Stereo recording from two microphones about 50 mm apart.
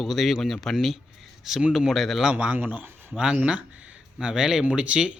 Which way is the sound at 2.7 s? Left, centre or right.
Right.